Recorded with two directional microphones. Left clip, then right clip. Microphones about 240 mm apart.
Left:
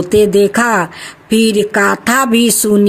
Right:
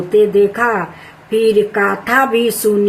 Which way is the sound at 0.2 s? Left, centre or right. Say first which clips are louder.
Left 1 dB; left.